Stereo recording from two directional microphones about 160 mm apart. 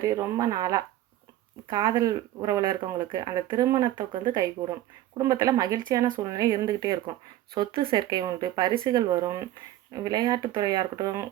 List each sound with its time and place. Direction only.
0.1 s speech: 20° right (ahead or behind)